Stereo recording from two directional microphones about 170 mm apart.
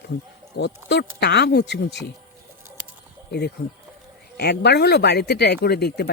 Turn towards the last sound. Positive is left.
turn(degrees=75)  # may be behind; listen again after turning